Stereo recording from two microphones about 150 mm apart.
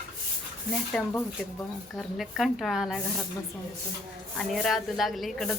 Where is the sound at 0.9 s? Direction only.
5° left (ahead or behind).